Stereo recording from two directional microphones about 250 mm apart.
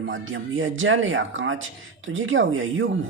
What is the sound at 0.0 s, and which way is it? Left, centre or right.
Speech, right.